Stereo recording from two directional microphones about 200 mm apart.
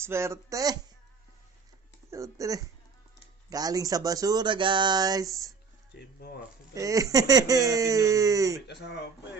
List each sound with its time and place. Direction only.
0.0 s speech: 15° right (ahead or behind)
2.0 s speech: 15° right (ahead or behind)
6.7 s speech: 15° right (ahead or behind)
8.6 s speech: 55° left (ahead or behind)